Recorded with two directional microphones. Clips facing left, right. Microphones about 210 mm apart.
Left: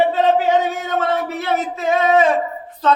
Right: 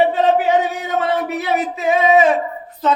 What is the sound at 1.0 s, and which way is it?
Speech, 15° right (ahead or behind).